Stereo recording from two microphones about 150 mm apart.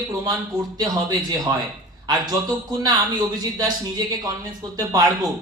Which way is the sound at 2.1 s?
25° right (ahead or behind).